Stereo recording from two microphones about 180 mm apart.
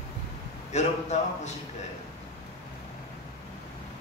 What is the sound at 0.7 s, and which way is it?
Speech, 40° left (ahead or behind).